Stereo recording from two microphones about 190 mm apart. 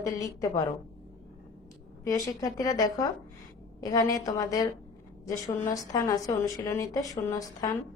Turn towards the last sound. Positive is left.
turn(degrees=20)  # may be behind; listen again after turning